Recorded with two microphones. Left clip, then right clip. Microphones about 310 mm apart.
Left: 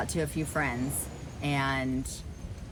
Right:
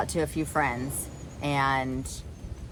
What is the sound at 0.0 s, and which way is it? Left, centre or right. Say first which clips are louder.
A woman's voice: right 4 dB; centre.